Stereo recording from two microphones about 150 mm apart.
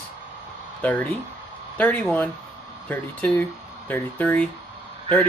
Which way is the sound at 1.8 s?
10° left (ahead or behind).